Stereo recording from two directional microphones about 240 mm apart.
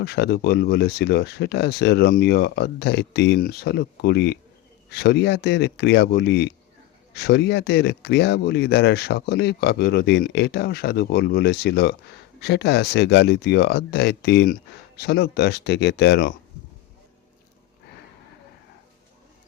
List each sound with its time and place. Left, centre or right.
0.0 s speech: left